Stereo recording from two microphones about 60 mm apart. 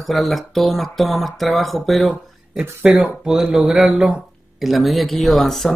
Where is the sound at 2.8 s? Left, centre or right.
Right.